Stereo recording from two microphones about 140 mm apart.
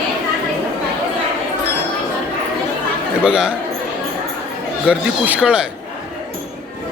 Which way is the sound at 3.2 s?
5° right (ahead or behind).